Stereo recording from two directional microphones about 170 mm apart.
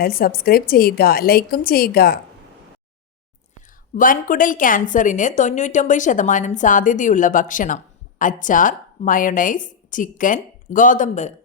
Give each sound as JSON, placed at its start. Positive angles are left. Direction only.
{"t": 0.0, "sound": "a woman's voice", "side_deg": 60}
{"t": 3.9, "sound": "a woman's voice", "side_deg": 55}